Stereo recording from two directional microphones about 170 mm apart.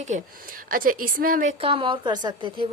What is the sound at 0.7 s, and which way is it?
Speech, 55° right (ahead or behind).